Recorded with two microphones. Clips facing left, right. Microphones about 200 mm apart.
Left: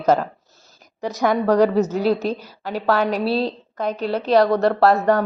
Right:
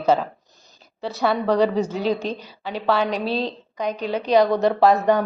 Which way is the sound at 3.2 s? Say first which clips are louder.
Left 3 dB; 40° left (ahead or behind).